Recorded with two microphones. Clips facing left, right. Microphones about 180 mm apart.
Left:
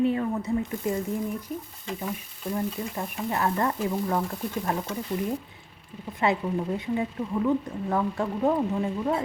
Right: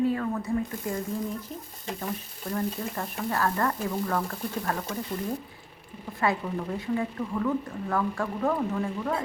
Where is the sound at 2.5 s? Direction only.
10° left (ahead or behind).